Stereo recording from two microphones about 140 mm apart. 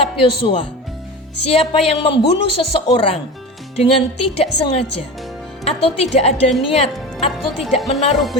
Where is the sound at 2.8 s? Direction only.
40° left (ahead or behind).